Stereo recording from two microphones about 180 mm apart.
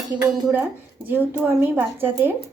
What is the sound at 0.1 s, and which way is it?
Speech, 10° right (ahead or behind).